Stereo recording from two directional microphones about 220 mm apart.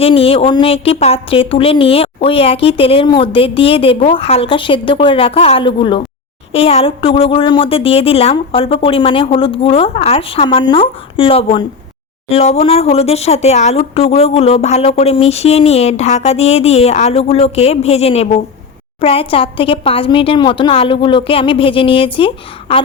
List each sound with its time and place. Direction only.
0.0 s a woman's voice: 25° left (ahead or behind)